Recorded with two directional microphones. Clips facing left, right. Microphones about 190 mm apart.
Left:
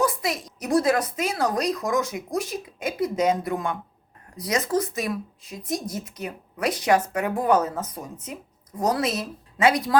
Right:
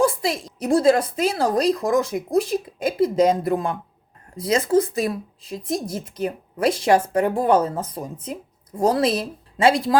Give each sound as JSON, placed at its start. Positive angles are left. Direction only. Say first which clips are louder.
{"t": 0.0, "sound": "a woman's voice", "louder": "right 4 dB", "side_deg": -30}